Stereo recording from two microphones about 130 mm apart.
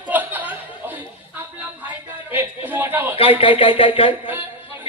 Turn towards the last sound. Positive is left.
turn(degrees=-15)  # may be behind; listen again after turning